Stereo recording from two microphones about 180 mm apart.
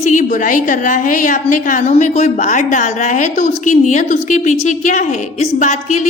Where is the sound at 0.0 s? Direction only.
40° left (ahead or behind).